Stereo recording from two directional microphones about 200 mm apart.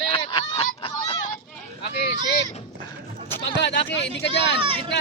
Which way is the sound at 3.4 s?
60° left (ahead or behind).